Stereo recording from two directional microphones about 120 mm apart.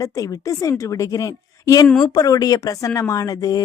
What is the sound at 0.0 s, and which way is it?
Speech, 30° left (ahead or behind).